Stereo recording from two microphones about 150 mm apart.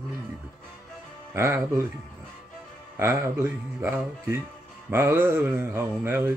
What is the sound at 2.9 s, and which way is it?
Speech, 15° right (ahead or behind).